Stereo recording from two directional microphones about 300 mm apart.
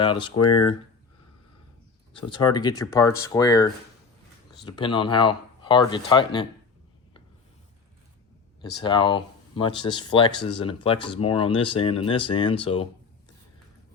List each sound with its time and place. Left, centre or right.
0.0 s speech: centre
2.1 s speech: centre
8.8 s speech: centre